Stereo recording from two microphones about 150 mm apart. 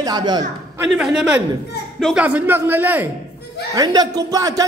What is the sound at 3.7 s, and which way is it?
Speech, 25° right (ahead or behind).